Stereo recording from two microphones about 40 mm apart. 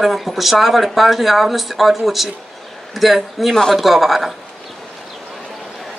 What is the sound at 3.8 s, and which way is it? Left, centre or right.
Speech, centre.